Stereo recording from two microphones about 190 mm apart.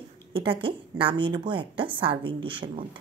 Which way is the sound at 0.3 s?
25° right (ahead or behind).